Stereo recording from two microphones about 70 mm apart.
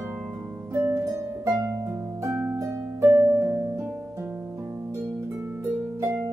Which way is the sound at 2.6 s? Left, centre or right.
Right.